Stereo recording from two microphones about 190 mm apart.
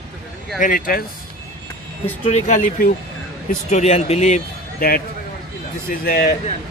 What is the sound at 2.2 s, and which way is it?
Speech, 35° left (ahead or behind).